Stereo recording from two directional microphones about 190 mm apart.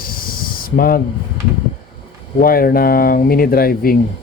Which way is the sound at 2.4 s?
50° left (ahead or behind).